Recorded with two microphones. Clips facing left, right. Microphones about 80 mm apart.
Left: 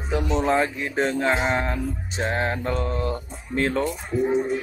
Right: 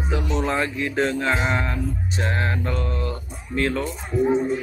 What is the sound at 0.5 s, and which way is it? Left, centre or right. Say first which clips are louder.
Speech: left 2 dB; centre.